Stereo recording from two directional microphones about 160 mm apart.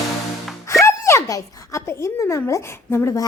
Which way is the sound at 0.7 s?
20° left (ahead or behind).